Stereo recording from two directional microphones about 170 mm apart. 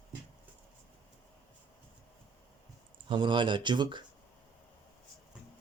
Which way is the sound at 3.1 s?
25° right (ahead or behind).